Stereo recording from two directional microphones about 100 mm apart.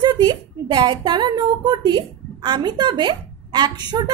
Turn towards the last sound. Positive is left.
turn(degrees=-45)  # may be behind; listen again after turning